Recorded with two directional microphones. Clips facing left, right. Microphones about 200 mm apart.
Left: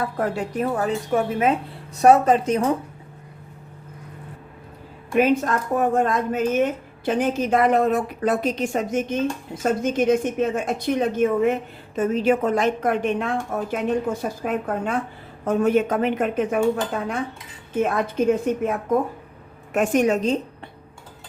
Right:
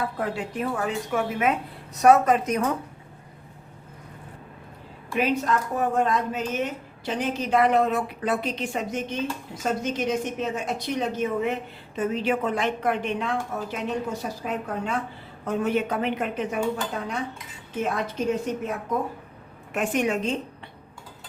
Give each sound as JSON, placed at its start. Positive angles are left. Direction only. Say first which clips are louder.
{"t": 0.2, "sound": "a woman's voice", "louder": "left 4 dB", "side_deg": 45}
{"t": 5.1, "sound": "a woman's voice", "louder": "left 5 dB", "side_deg": 50}
{"t": 17.7, "sound": "a woman's voice", "louder": "left 6 dB", "side_deg": 50}